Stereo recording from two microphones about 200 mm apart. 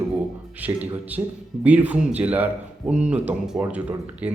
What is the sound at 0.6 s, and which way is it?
Speech, 10° right (ahead or behind).